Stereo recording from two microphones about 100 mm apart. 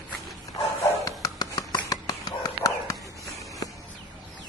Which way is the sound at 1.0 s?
40° left (ahead or behind).